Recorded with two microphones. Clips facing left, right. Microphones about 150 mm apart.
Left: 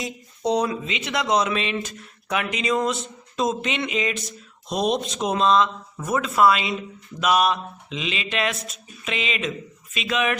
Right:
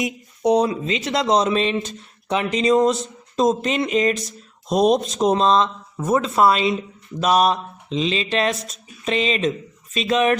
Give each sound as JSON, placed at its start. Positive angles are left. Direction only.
{"t": 0.0, "sound": "speech", "side_deg": -20}
{"t": 0.9, "sound": "speech", "side_deg": -35}
{"t": 4.2, "sound": "speech", "side_deg": 0}
{"t": 5.2, "sound": "speech", "side_deg": -35}
{"t": 8.5, "sound": "speech", "side_deg": 0}
{"t": 9.0, "sound": "speech", "side_deg": -35}